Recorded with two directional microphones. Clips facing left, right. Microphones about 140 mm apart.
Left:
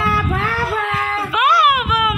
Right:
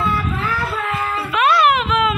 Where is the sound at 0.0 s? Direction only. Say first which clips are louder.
Left 2 dB; 80° left.